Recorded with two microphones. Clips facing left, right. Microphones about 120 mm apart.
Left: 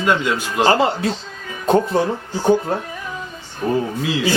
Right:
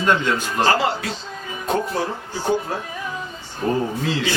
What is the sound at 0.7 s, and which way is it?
Speech, 25° left (ahead or behind).